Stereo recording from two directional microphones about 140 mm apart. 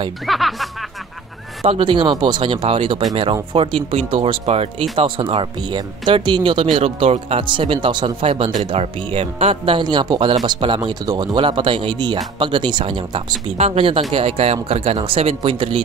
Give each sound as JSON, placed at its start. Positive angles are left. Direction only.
{"t": 0.3, "sound": "speech", "side_deg": 0}
{"t": 1.7, "sound": "speech", "side_deg": -35}
{"t": 9.8, "sound": "speech", "side_deg": -30}